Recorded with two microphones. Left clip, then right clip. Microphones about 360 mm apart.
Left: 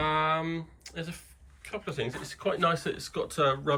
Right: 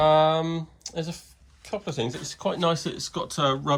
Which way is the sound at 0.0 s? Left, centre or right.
Centre.